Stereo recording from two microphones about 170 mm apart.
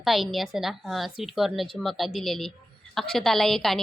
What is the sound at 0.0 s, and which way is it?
A woman's voice, centre (ahead or behind).